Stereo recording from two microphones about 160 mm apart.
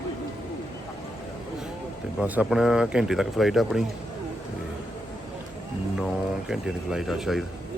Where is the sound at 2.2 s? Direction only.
5° right (ahead or behind).